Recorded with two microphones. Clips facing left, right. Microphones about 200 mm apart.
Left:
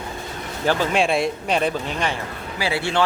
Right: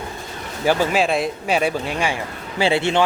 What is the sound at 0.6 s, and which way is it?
Speech, 10° right (ahead or behind).